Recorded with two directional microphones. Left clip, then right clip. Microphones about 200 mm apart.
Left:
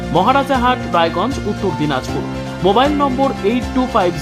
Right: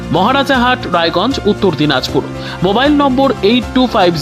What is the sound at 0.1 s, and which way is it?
Speech, 30° right (ahead or behind).